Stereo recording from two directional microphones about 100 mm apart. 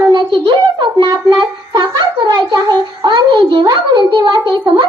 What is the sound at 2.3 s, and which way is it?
Music, 45° right (ahead or behind).